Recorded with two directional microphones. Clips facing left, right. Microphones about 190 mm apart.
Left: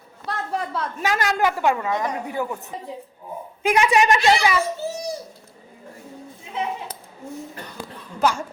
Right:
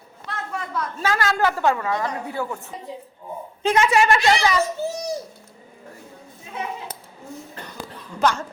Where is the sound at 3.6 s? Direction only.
15° left (ahead or behind).